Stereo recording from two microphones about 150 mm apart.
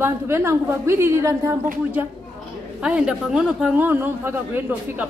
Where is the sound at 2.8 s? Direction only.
5° right (ahead or behind).